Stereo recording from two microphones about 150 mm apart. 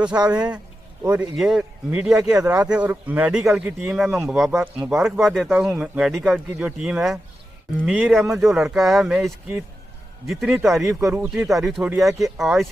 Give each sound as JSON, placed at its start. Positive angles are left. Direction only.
{"t": 0.0, "sound": "speech", "side_deg": -5}
{"t": 11.0, "sound": "speech", "side_deg": -20}
{"t": 11.4, "sound": "speech", "side_deg": 0}